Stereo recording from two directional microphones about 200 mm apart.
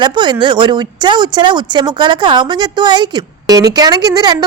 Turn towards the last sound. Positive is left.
turn(degrees=-20)  # may be behind; listen again after turning